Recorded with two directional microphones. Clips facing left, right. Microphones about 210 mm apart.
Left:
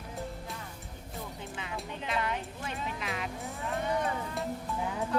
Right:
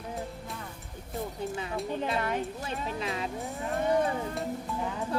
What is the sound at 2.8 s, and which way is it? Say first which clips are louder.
Speech: right 4 dB; 30° right (ahead or behind).